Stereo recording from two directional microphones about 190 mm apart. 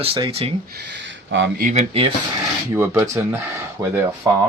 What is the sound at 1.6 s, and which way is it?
Speech, 35° right (ahead or behind).